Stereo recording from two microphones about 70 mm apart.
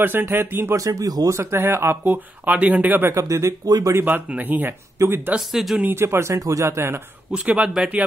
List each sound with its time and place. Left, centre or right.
0.0 s speech: right
0.7 s speech: right
1.3 s speech: right
3.1 s speech: right
3.6 s speech: right
4.4 s speech: right
4.9 s speech: right
5.5 s speech: centre
5.9 s speech: right
7.3 s a man's voice: centre